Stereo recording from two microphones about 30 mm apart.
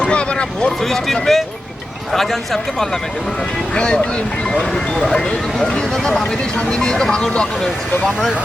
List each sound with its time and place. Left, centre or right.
0.0 s vehicle: left
0.9 s speech: centre
3.8 s speech: left
4.5 s speech: centre
5.6 s speech: left